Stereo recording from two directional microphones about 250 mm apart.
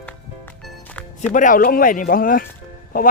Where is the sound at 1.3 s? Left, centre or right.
Left.